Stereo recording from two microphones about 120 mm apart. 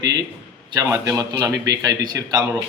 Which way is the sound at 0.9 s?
20° right (ahead or behind).